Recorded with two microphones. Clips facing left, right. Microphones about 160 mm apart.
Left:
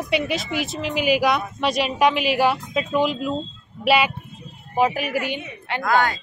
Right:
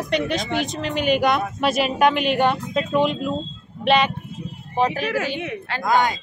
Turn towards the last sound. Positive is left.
turn(degrees=-15)  # may be behind; listen again after turning